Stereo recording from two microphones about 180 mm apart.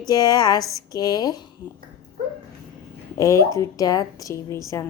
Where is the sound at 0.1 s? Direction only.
20° left (ahead or behind).